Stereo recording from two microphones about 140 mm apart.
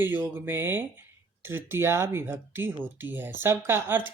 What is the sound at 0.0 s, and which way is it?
Speech, 15° right (ahead or behind).